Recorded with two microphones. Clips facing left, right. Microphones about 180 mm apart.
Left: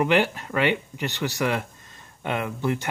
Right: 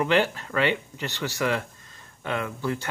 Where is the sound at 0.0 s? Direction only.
15° left (ahead or behind).